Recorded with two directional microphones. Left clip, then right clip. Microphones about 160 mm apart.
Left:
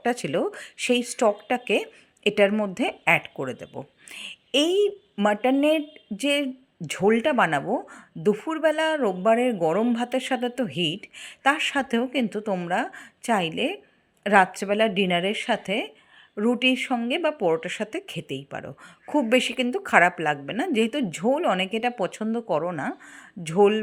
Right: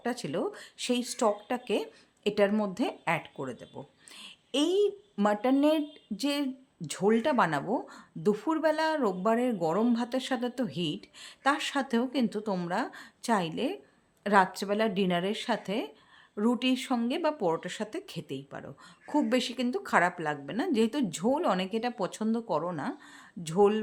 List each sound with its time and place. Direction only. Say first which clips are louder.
0.0 s speech: left 8 dB; 20° left (ahead or behind)
3.8 s dog: left 8 dB; 20° left (ahead or behind)
5.2 s speech: left 5 dB; 15° left (ahead or behind)
18.2 s speech: left 6 dB; 45° right (ahead or behind)
18.5 s speech: left 8 dB; 15° left (ahead or behind)